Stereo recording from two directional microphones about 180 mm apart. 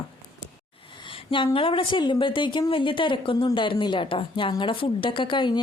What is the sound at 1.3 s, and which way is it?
A woman's voice, 30° left (ahead or behind).